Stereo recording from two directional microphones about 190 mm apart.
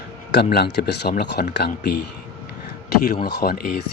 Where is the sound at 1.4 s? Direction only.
50° left (ahead or behind).